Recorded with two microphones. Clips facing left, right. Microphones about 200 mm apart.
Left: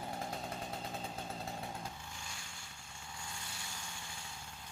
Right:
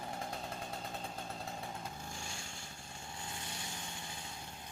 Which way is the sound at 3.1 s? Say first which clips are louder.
Right 2 dB; 25° right (ahead or behind).